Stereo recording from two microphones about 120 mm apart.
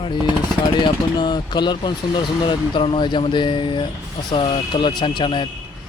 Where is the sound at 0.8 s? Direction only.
35° left (ahead or behind).